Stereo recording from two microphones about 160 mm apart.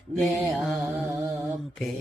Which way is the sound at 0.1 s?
Centre (ahead or behind).